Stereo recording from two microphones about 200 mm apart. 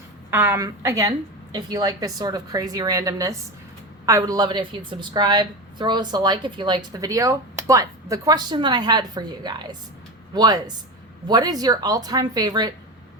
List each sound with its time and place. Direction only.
0.3 s a woman's voice: 10° right (ahead or behind)